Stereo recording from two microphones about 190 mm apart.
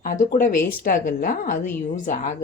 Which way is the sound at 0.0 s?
45° left (ahead or behind).